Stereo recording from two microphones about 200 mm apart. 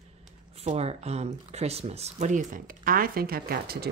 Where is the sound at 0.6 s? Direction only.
30° right (ahead or behind); by 3.9 s 50° right (ahead or behind).